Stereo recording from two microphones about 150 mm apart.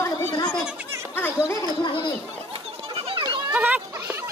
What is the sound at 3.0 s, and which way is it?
Children playing, 40° right (ahead or behind).